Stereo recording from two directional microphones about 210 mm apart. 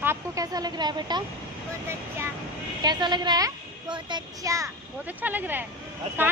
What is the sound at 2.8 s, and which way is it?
A child's voice, 20° right (ahead or behind).